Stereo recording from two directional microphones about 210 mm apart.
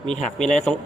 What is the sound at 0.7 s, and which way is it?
Speech, 5° left (ahead or behind).